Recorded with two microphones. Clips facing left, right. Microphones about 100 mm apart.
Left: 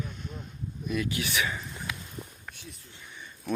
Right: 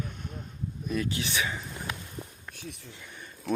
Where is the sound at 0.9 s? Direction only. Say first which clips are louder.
Left 1 dB; 35° right (ahead or behind).